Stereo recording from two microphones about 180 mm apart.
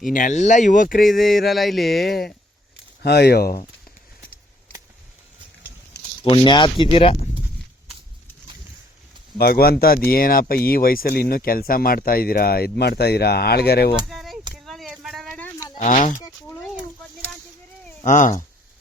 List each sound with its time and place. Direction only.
0.0 s speech: 50° left (ahead or behind)
1.0 s a sound: centre (ahead or behind)
3.0 s speech: 65° left (ahead or behind)
6.2 s speech: 25° left (ahead or behind)
9.4 s speech: 55° left (ahead or behind)
14.1 s a sound: centre (ahead or behind)
15.7 s speech: 40° left (ahead or behind)
16.1 s a sound: 15° left (ahead or behind)
18.0 s speech: 45° left (ahead or behind)